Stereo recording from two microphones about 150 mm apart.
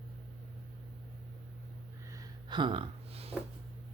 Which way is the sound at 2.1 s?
30° right (ahead or behind).